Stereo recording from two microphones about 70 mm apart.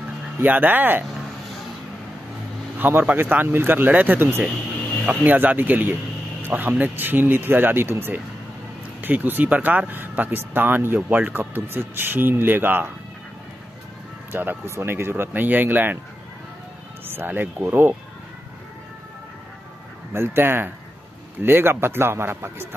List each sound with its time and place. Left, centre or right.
0.4 s speech: right
2.8 s speech: right
14.3 s speech: right
17.1 s speech: right
20.1 s speech: right